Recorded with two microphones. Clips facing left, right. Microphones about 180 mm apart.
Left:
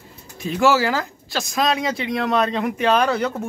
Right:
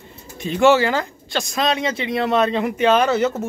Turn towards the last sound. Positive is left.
turn(degrees=-5)  # may be behind; listen again after turning